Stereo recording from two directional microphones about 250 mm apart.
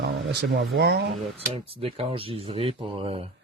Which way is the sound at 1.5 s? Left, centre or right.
Right.